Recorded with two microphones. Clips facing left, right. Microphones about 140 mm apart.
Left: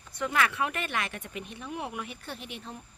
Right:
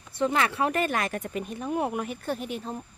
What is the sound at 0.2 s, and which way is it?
Speech, 30° right (ahead or behind).